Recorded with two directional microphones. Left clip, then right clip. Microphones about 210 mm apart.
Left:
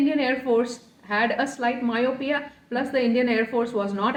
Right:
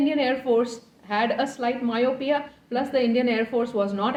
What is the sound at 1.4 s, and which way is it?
A woman's voice, 15° right (ahead or behind).